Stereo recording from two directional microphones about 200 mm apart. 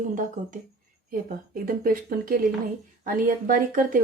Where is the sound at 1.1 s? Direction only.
45° right (ahead or behind).